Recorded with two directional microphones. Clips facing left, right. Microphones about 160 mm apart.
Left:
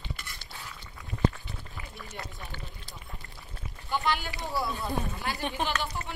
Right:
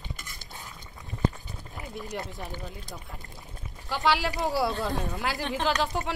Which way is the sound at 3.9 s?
90° right.